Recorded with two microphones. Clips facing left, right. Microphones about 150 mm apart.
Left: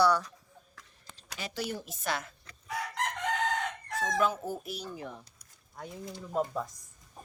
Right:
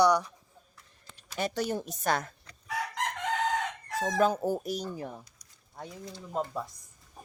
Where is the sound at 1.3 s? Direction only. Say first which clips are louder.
Right 6 dB; 50° right (ahead or behind).